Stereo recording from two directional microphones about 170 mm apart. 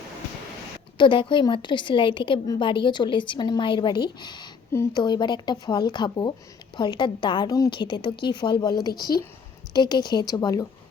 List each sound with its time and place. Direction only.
0.9 s a woman's voice: 30° left (ahead or behind)